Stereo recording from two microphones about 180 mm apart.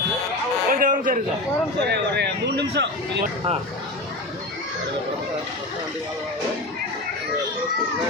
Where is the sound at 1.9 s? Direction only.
70° right (ahead or behind).